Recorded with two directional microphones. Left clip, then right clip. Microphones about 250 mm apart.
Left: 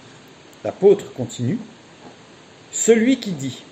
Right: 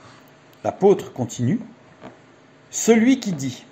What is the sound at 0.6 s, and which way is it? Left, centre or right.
Speech, right.